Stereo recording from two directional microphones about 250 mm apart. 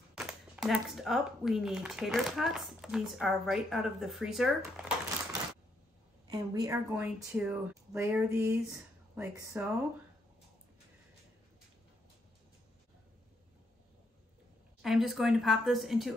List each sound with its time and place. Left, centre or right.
0.1 s speech: centre
6.3 s speech: centre
14.8 s speech: centre